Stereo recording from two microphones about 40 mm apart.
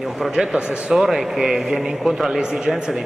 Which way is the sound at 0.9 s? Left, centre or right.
Centre.